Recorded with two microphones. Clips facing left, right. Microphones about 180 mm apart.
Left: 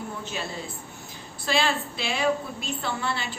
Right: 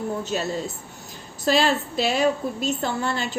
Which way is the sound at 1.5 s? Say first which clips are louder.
Right 5 dB; 40° right (ahead or behind).